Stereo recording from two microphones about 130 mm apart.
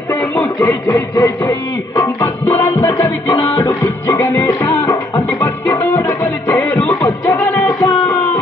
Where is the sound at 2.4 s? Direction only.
15° left (ahead or behind).